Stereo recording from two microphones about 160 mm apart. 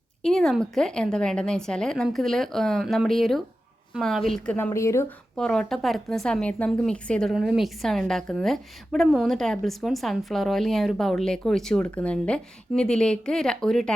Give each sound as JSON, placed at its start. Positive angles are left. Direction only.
{"t": 0.2, "sound": "speech", "side_deg": 5}
{"t": 4.5, "sound": "speech", "side_deg": 15}
{"t": 5.4, "sound": "speech", "side_deg": 5}